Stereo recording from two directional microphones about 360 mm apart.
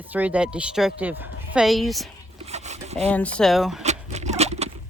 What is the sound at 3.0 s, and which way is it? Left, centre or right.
Speech, centre.